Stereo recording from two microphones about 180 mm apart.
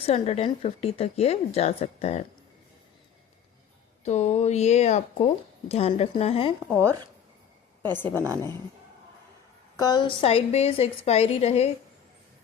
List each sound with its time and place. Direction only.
0.0 s speech: 35° left (ahead or behind)
4.0 s speech: 40° left (ahead or behind)
6.7 s speech: 15° right (ahead or behind)
8.1 s speech: 15° right (ahead or behind)
9.7 s speech: 20° left (ahead or behind)